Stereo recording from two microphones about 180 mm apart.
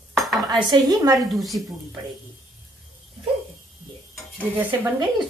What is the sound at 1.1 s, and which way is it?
Speech, centre (ahead or behind).